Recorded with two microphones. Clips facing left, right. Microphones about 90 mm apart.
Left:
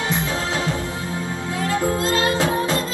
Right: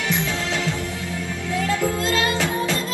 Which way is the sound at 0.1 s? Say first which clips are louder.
Left 1 dB; 35° left (ahead or behind).